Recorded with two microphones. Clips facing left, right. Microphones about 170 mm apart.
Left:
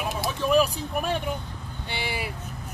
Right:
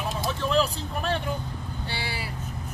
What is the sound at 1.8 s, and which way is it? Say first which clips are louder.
Vehicle: left 4 dB; 20° left (ahead or behind).